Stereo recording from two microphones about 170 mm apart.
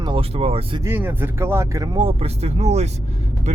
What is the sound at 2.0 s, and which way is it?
Speech, 40° right (ahead or behind).